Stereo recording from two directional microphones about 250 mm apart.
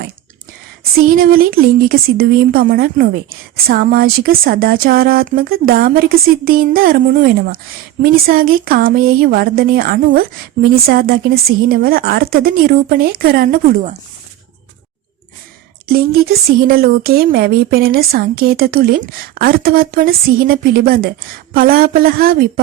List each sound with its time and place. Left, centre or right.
0.9 s speech: right
16.6 s speech: right